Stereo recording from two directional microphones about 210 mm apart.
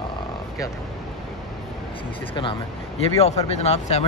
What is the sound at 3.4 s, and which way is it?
Speech, 30° left (ahead or behind).